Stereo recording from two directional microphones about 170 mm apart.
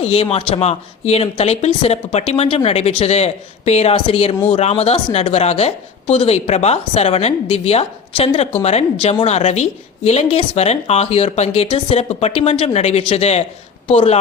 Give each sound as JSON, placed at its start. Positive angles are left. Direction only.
{"t": 0.0, "sound": "a woman's voice", "side_deg": 35}